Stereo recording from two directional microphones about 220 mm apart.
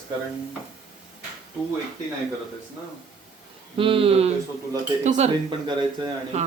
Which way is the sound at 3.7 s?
25° right (ahead or behind).